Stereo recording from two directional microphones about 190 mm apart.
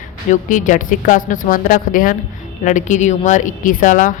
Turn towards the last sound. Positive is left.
turn(degrees=45)  # may be behind; listen again after turning